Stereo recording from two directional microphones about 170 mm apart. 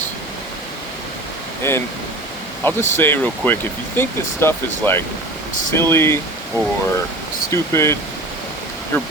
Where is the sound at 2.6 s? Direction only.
10° left (ahead or behind).